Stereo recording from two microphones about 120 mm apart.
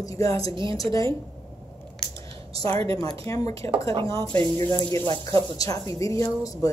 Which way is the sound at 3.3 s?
20° left (ahead or behind).